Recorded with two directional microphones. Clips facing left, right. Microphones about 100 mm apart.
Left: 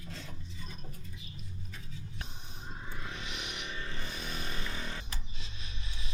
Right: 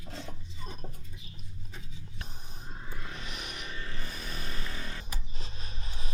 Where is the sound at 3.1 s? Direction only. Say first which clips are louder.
Even; 40° right (ahead or behind).